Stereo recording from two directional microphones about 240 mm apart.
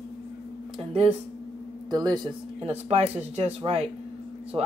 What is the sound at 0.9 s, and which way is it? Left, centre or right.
Speech, right.